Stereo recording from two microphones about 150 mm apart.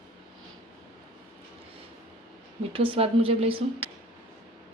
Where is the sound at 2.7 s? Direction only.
35° right (ahead or behind).